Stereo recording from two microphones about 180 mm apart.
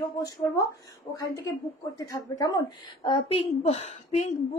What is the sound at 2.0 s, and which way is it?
Speech, 20° left (ahead or behind).